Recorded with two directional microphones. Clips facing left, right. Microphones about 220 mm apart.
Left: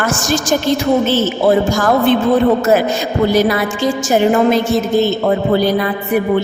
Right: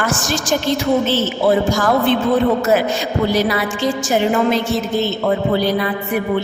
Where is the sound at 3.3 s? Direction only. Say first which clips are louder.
Left 4 dB; 45° left (ahead or behind).